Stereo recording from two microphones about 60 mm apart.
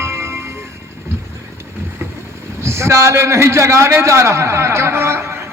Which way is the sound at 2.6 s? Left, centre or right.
Right.